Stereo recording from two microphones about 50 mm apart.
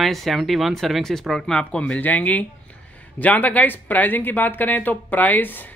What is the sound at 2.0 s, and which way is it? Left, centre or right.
Speech, left.